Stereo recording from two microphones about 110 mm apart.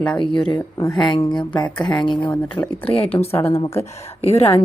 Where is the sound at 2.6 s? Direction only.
30° left (ahead or behind).